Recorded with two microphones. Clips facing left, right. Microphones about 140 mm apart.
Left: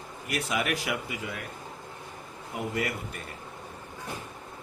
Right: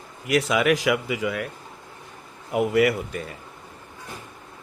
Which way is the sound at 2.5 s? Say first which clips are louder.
Right 12 dB; 90° right.